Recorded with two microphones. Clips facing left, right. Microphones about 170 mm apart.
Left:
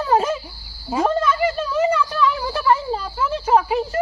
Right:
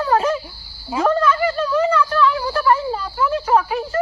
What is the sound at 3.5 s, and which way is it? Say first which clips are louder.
Speech: left 4 dB; 25° left (ahead or behind).